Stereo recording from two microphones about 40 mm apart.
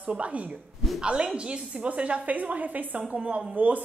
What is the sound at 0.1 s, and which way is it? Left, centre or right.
A woman's voice, right.